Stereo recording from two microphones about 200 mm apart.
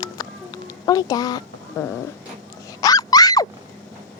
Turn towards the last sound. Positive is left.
turn(degrees=20)  # may be behind; listen again after turning